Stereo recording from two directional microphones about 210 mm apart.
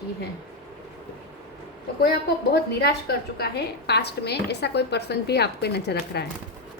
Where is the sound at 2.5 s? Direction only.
50° left (ahead or behind).